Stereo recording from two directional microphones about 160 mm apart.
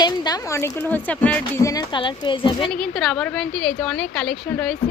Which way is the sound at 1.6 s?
20° left (ahead or behind).